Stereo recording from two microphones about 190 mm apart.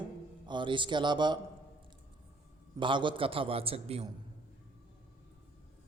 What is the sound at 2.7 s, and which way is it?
A man's voice, 25° right (ahead or behind).